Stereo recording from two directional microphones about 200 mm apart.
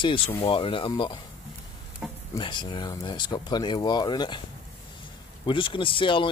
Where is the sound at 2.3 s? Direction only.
20° left (ahead or behind).